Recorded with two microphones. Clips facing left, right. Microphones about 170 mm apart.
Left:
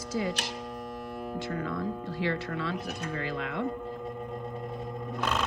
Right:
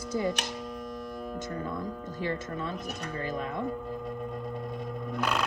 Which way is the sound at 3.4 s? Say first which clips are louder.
Even; 70° left (ahead or behind).